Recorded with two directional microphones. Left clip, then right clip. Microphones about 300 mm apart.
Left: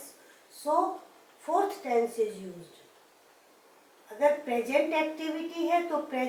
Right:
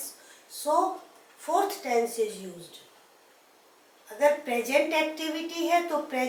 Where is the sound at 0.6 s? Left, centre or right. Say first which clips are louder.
Right 2 dB; centre.